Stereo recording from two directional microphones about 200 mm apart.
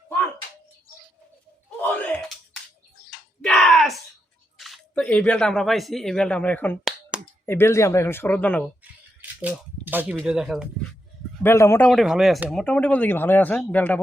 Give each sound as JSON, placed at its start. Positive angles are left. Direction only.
{"t": 3.4, "sound": "a sound", "side_deg": 5}
{"t": 4.5, "sound": "speech", "side_deg": 0}
{"t": 8.8, "sound": "a sound", "side_deg": -10}
{"t": 10.2, "sound": "speech", "side_deg": -5}
{"t": 11.4, "sound": "speech", "side_deg": 15}
{"t": 11.9, "sound": "speech", "side_deg": 0}